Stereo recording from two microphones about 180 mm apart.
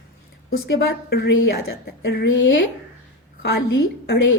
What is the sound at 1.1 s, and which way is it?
A woman's voice, 65° left (ahead or behind).